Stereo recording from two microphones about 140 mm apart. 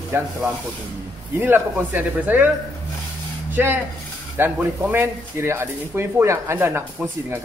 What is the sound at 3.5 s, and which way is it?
Speech, 15° right (ahead or behind).